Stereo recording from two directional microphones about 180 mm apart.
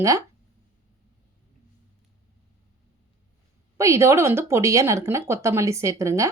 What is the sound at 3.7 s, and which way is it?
Speech, 15° right (ahead or behind).